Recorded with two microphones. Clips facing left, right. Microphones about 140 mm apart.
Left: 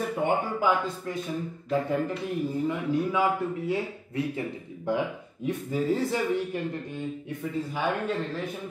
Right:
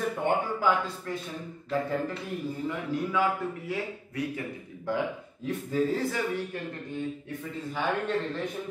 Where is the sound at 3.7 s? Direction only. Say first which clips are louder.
Left 4 dB; 25° left (ahead or behind).